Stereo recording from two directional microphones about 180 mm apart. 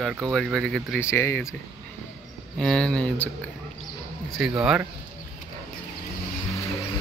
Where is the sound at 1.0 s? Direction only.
15° left (ahead or behind).